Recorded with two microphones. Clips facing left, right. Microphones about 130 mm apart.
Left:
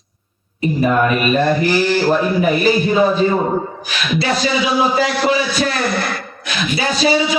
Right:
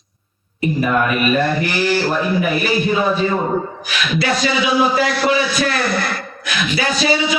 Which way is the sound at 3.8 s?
30° left (ahead or behind).